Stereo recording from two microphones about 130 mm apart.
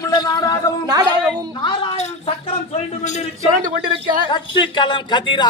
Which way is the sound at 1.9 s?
55° left (ahead or behind).